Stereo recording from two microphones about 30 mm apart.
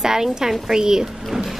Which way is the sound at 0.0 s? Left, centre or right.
Centre.